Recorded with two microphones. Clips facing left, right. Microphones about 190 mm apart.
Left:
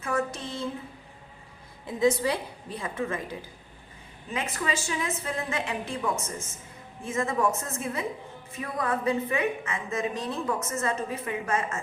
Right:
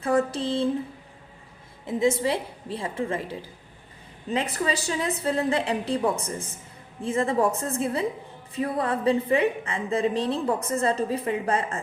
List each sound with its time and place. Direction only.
0.0 s a woman's voice: 35° right (ahead or behind)
1.9 s a woman's voice: 25° right (ahead or behind)